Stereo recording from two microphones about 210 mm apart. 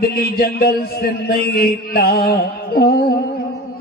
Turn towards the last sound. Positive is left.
turn(degrees=45)  # may be behind; listen again after turning